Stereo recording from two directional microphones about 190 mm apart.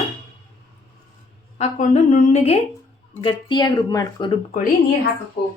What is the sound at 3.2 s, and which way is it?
Speech, 25° left (ahead or behind).